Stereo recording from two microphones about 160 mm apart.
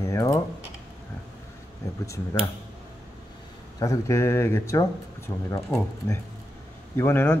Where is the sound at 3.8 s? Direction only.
20° left (ahead or behind).